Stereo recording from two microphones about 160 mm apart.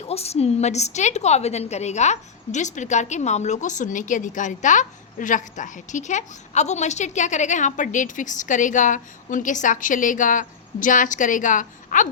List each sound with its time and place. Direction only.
0.0 s a woman's voice: 40° left (ahead or behind); by 12.0 s 55° left (ahead or behind)